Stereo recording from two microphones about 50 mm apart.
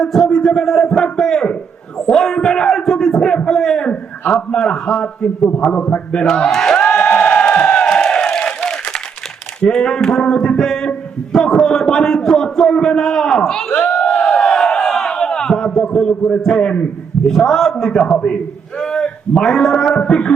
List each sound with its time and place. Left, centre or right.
0.0 s a man's voice: centre
6.1 s a man's voice: centre
6.9 s crowd: left
7.8 s crowd: centre
9.6 s a man's voice: centre
13.8 s a sound: centre
16.5 s a man's voice: centre
18.0 s a man's voice: left